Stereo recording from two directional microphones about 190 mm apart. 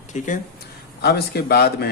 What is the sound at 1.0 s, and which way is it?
Speech, 60° left (ahead or behind).